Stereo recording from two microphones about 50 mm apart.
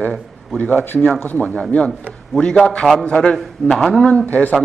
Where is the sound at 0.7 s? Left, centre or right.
Left.